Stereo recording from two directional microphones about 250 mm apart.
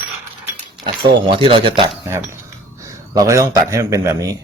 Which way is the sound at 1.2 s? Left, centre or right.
Centre.